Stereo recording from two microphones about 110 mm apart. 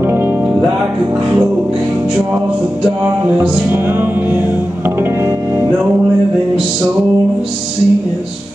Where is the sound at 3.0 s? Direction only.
20° right (ahead or behind).